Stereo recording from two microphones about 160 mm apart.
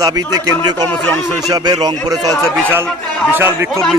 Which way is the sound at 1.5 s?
25° right (ahead or behind).